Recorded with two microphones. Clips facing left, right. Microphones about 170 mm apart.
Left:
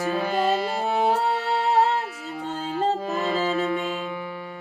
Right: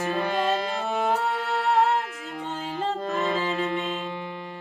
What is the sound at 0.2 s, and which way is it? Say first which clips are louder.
Music: left 2 dB; 5° left (ahead or behind).